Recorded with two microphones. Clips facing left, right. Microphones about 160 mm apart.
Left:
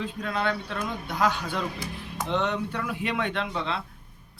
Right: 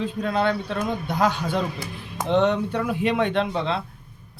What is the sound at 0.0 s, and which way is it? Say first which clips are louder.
Speech: right 6 dB; 30° right (ahead or behind).